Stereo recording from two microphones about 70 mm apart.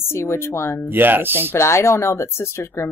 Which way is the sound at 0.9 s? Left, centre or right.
Right.